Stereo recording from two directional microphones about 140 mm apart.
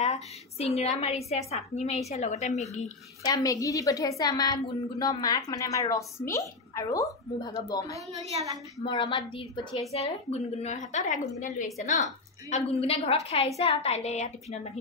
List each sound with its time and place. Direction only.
0.0 s a woman's voice: 50° left (ahead or behind)
3.3 s a woman's voice: 25° left (ahead or behind)
9.9 s a woman's voice: 50° left (ahead or behind)